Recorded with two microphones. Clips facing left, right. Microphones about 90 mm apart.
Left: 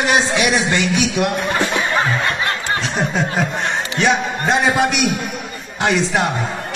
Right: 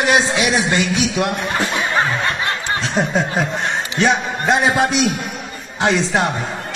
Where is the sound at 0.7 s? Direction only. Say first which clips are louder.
Even; 25° right (ahead or behind).